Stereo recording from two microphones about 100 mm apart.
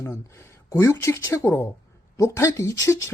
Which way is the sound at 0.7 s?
30° left (ahead or behind).